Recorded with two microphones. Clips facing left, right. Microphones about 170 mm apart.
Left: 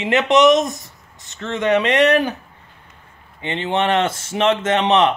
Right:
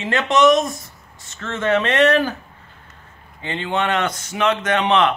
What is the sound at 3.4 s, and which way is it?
Speech, 25° left (ahead or behind).